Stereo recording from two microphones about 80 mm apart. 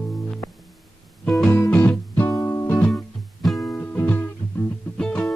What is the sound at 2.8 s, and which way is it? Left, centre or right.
Music, centre.